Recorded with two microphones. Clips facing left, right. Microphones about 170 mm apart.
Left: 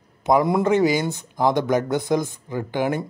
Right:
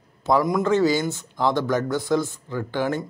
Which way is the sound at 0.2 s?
15° left (ahead or behind).